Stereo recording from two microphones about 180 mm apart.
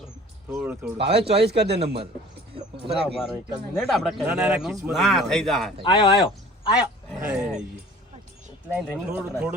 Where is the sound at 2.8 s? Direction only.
30° right (ahead or behind).